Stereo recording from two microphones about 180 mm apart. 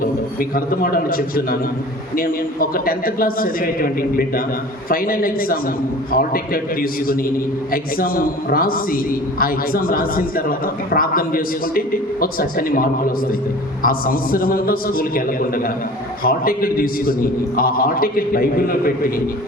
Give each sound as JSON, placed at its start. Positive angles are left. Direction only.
{"t": 0.0, "sound": "a man's voice", "side_deg": 55}